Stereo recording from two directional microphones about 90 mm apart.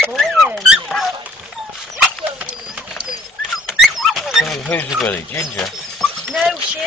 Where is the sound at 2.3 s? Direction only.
10° right (ahead or behind).